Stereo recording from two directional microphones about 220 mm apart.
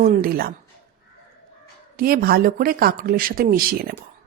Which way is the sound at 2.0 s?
40° right (ahead or behind).